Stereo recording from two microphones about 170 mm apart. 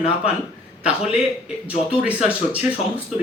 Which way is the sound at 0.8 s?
5° right (ahead or behind).